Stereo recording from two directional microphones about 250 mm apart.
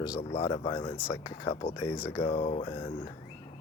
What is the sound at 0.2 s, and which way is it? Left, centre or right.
Speech, left.